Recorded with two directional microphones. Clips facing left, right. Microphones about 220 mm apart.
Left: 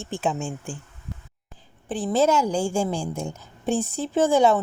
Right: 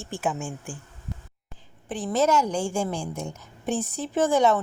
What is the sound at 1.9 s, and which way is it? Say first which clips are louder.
Speech: left 2 dB; 30° left (ahead or behind).